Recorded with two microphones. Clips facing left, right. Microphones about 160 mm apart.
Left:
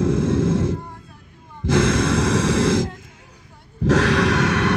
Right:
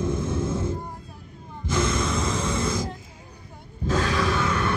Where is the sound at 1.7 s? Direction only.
80° left.